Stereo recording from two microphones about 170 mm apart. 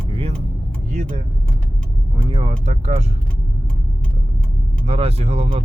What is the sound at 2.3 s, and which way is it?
Speech, 35° right (ahead or behind).